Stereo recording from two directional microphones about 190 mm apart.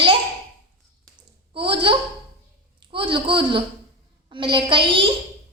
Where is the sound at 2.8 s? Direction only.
25° right (ahead or behind).